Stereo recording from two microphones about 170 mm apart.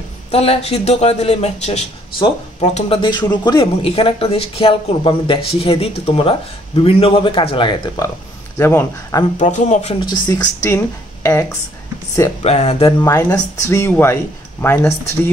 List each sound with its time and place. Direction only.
0.3 s speech: 35° left (ahead or behind)
3.0 s speech: 25° left (ahead or behind)
9.4 s a man's voice: 45° left (ahead or behind)
10.2 s a woman's voice: 20° left (ahead or behind)
12.4 s speech: 35° left (ahead or behind)
13.0 s speech: 15° left (ahead or behind)